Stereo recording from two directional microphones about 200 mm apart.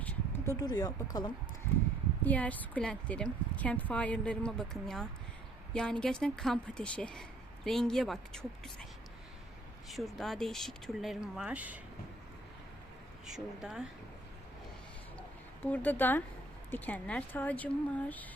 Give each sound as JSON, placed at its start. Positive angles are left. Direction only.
{"t": 0.0, "sound": "speech", "side_deg": 10}
{"t": 2.2, "sound": "a woman's voice", "side_deg": 5}
{"t": 9.9, "sound": "a woman's voice", "side_deg": 0}
{"t": 13.2, "sound": "a woman's voice", "side_deg": 0}
{"t": 15.6, "sound": "speech", "side_deg": 10}